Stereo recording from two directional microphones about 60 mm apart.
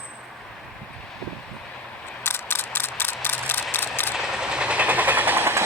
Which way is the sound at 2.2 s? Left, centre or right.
Left.